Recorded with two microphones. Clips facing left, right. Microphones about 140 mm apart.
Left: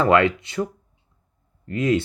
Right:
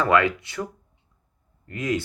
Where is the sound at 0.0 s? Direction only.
25° left (ahead or behind).